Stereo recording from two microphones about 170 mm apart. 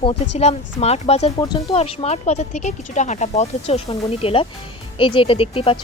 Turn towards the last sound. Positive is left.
turn(degrees=35)  # may be behind; listen again after turning